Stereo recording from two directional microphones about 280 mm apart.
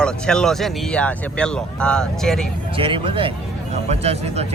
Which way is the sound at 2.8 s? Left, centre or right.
Centre.